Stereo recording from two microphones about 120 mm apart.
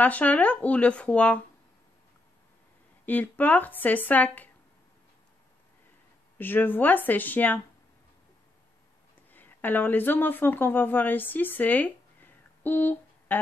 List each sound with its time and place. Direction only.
0.0 s speech: 10° left (ahead or behind)
3.1 s speech: 15° left (ahead or behind)
6.3 s speech: 15° left (ahead or behind)
9.3 s speech: 15° left (ahead or behind)